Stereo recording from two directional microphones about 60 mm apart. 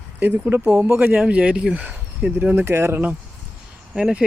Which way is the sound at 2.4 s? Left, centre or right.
Right.